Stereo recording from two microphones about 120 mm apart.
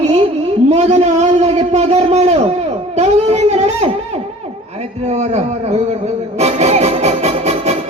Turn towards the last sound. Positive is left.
turn(degrees=-60)  # may be behind; listen again after turning